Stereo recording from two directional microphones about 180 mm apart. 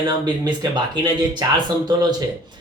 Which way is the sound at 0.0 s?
25° right (ahead or behind).